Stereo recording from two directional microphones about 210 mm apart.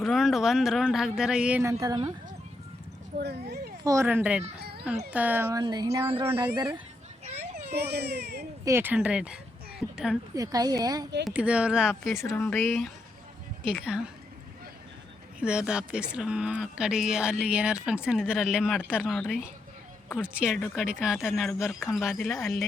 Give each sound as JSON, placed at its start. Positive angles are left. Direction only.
{"t": 0.0, "sound": "speech", "side_deg": 0}
{"t": 3.2, "sound": "speech", "side_deg": -50}
{"t": 3.8, "sound": "speech", "side_deg": -10}
{"t": 4.6, "sound": "music", "side_deg": -50}
{"t": 5.1, "sound": "speech", "side_deg": -10}
{"t": 7.3, "sound": "children playing", "side_deg": -30}
{"t": 7.8, "sound": "speech", "side_deg": -50}
{"t": 8.6, "sound": "a woman's voice", "side_deg": -10}
{"t": 10.3, "sound": "speech", "side_deg": -15}
{"t": 11.3, "sound": "speech", "side_deg": -5}
{"t": 12.3, "sound": "speech", "side_deg": 10}
{"t": 13.7, "sound": "speech", "side_deg": -5}
{"t": 15.4, "sound": "speech", "side_deg": -5}